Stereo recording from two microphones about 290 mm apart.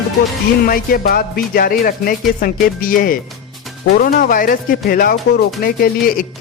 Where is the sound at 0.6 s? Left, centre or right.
Left.